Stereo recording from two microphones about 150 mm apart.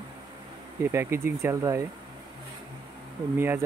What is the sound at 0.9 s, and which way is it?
Speech, 15° right (ahead or behind).